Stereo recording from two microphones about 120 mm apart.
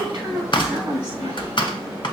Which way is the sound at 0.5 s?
40° left (ahead or behind).